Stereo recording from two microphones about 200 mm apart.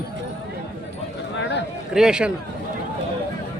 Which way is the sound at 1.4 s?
60° left (ahead or behind).